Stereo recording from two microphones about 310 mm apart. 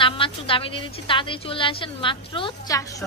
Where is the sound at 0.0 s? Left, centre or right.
Centre.